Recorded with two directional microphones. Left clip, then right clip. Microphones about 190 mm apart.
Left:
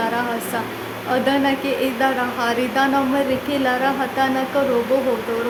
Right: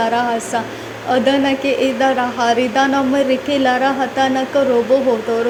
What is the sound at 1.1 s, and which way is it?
Speech, 20° right (ahead or behind).